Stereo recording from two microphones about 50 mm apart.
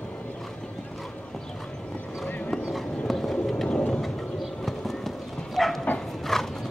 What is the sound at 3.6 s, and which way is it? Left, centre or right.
Rain, left.